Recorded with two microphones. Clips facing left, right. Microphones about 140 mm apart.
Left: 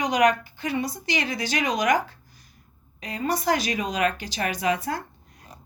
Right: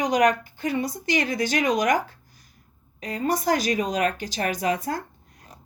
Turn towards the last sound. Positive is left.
turn(degrees=-45)  # may be behind; listen again after turning